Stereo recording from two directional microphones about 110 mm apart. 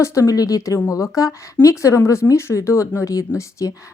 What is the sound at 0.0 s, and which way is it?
Speech, 30° left (ahead or behind).